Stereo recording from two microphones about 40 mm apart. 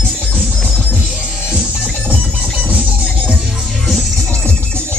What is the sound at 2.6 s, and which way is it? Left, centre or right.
Music, right.